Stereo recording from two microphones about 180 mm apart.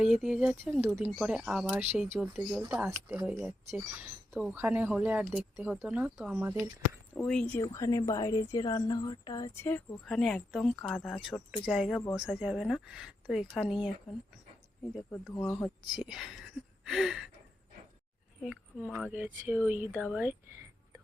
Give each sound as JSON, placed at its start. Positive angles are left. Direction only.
{"t": 0.0, "sound": "speech", "side_deg": -5}
{"t": 7.2, "sound": "speech", "side_deg": 5}
{"t": 7.6, "sound": "a woman's voice", "side_deg": 20}
{"t": 9.6, "sound": "speech", "side_deg": 5}
{"t": 15.3, "sound": "speech", "side_deg": 5}
{"t": 16.8, "sound": "a sound", "side_deg": 0}
{"t": 18.8, "sound": "speech", "side_deg": -10}